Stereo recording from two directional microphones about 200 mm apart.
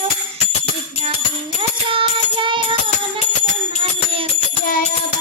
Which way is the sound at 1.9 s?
25° right (ahead or behind).